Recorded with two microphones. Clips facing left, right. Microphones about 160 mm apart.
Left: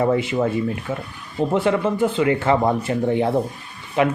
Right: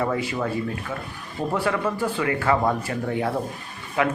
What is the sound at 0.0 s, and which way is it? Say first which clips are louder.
A man's voice: left 6 dB; 25° left (ahead or behind).